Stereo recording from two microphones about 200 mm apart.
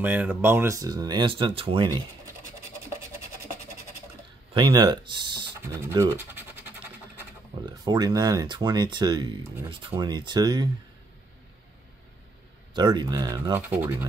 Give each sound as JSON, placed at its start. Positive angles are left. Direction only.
{"t": 0.0, "sound": "speech", "side_deg": -10}
{"t": 4.6, "sound": "speech", "side_deg": -20}
{"t": 5.9, "sound": "speech", "side_deg": -10}
{"t": 7.6, "sound": "speech", "side_deg": -20}
{"t": 12.7, "sound": "speech", "side_deg": -20}